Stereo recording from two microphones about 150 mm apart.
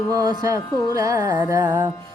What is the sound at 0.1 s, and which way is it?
Music, 25° right (ahead or behind).